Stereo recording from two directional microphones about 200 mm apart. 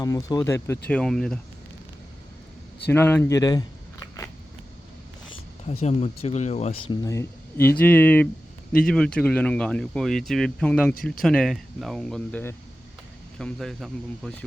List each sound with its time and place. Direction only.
0.0 s speech: 20° left (ahead or behind)
2.9 s a sound: 10° left (ahead or behind)
5.8 s speech: 30° left (ahead or behind); by 14.4 s centre (ahead or behind)